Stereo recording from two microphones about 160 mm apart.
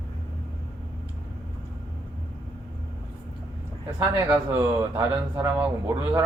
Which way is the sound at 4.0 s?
25° right (ahead or behind).